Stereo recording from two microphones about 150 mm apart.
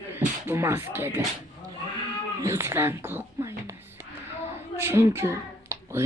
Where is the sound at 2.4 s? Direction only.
20° right (ahead or behind).